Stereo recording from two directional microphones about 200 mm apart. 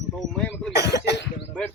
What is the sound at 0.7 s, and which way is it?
Cough, 55° left (ahead or behind).